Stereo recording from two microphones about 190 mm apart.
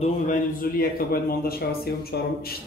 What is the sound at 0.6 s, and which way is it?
Speech, 50° left (ahead or behind).